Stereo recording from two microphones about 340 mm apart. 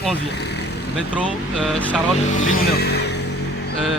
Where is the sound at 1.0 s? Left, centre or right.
Centre.